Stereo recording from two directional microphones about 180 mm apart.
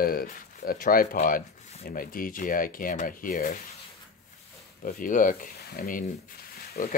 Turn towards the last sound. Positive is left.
turn(degrees=55)  # may be behind; listen again after turning